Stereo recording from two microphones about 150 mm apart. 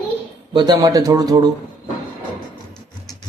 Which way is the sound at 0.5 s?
30° right (ahead or behind).